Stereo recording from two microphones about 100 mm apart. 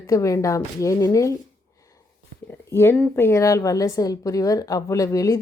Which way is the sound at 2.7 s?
25° left (ahead or behind).